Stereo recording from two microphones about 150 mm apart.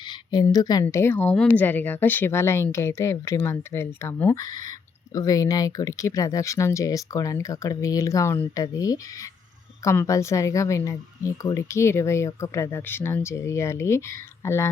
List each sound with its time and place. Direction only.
0.1 s a woman's voice: 25° left (ahead or behind)